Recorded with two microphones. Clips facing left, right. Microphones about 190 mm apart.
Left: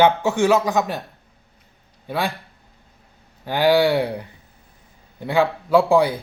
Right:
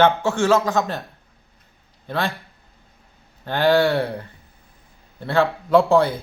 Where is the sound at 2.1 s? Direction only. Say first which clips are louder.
Even; 10° left (ahead or behind).